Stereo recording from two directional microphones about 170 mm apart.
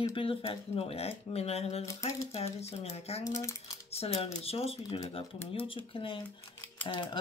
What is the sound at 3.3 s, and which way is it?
Speech, 20° left (ahead or behind).